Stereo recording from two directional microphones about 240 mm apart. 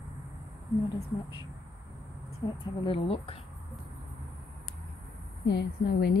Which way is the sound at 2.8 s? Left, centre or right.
Left.